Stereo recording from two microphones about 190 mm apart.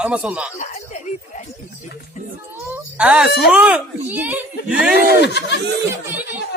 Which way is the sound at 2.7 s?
5° right (ahead or behind).